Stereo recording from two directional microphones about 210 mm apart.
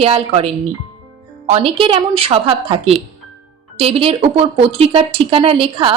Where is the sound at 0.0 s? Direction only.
25° right (ahead or behind).